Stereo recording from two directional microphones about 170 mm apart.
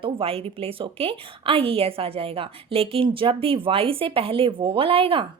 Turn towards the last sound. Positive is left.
turn(degrees=-35)  # may be behind; listen again after turning